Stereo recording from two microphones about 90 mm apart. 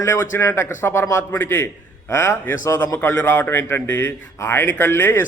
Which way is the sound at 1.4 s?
25° left (ahead or behind).